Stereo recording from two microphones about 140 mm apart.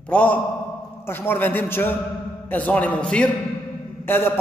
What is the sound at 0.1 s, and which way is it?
A man's voice, 10° left (ahead or behind).